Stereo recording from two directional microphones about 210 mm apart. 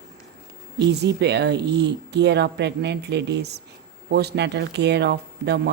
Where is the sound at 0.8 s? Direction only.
55° right (ahead or behind).